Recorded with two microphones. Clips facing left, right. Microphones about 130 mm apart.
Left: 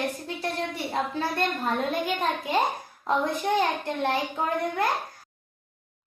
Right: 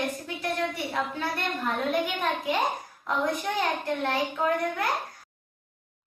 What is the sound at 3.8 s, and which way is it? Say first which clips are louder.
A child's voice: left 1 dB; 25° left (ahead or behind).